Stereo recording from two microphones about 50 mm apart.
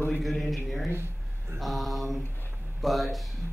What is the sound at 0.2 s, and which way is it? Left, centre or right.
Speech, centre.